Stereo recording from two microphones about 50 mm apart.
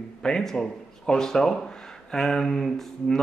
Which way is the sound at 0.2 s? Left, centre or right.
Centre.